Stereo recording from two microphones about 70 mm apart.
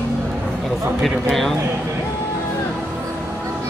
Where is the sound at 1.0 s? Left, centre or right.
Centre.